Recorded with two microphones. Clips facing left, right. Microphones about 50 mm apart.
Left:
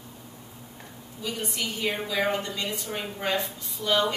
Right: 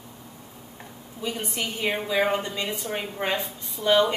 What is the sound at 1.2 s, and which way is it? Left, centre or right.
A woman's voice, right.